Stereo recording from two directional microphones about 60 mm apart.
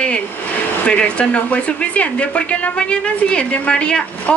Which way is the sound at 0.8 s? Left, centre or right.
Centre.